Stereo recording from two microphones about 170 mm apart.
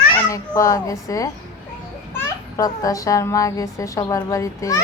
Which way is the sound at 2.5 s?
20° left (ahead or behind).